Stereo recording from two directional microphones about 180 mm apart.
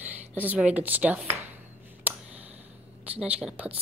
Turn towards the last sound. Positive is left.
turn(degrees=-5)  # may be behind; listen again after turning